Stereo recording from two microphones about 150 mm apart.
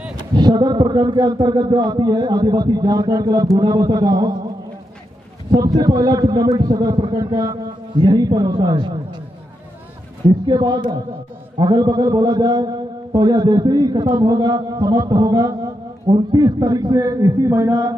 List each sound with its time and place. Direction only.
0.4 s a man's voice: 25° right (ahead or behind)
5.5 s a man's voice: 25° right (ahead or behind)
10.4 s a man's voice: 30° right (ahead or behind)